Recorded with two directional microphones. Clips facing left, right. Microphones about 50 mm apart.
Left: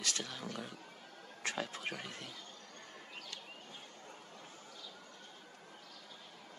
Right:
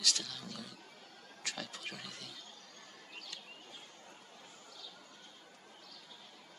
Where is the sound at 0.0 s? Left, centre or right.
Left.